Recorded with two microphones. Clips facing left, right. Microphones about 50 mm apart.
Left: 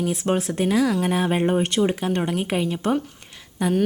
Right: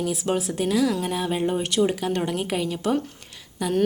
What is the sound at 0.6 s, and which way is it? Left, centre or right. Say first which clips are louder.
A woman's voice: left 2 dB; left.